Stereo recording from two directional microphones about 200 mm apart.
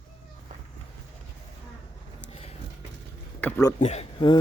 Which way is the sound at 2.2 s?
25° left (ahead or behind).